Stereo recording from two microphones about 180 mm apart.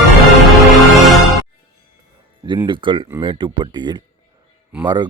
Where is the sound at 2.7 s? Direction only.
25° right (ahead or behind).